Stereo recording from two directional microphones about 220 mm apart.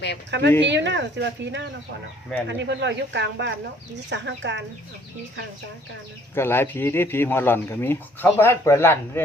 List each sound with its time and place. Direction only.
0.3 s speech: 55° right (ahead or behind)
6.3 s speech: 10° left (ahead or behind)